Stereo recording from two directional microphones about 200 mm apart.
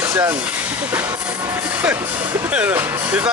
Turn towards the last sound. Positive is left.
turn(degrees=-5)  # may be behind; listen again after turning